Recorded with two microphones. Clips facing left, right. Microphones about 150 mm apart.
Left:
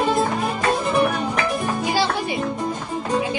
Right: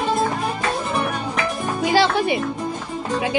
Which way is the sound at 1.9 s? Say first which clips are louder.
Right 7 dB; 75° right (ahead or behind).